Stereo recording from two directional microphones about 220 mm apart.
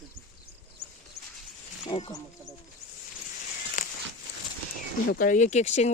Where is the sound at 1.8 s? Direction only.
20° left (ahead or behind).